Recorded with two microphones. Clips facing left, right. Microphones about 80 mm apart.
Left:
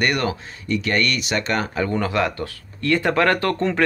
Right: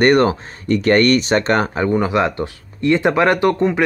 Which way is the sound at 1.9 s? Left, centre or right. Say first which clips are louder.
Right 5 dB; centre.